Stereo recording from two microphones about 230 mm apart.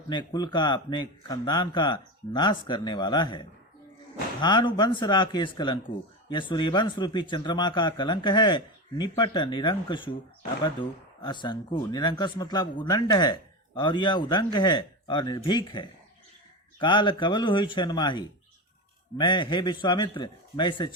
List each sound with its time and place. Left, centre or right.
0.1 s speech: centre